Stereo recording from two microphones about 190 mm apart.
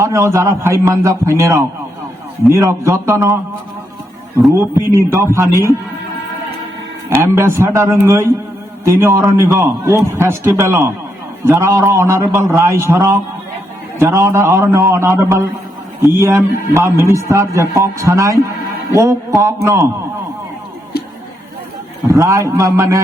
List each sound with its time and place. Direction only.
0.0 s a man's voice: 15° right (ahead or behind)
4.4 s a man's voice: 10° right (ahead or behind)
7.1 s a man's voice: 15° right (ahead or behind)
22.1 s a man's voice: 15° right (ahead or behind)